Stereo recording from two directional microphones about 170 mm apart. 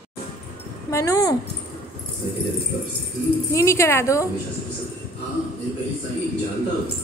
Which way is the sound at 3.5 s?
15° left (ahead or behind).